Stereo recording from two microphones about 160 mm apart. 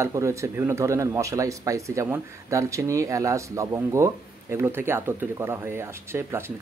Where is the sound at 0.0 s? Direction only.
20° right (ahead or behind).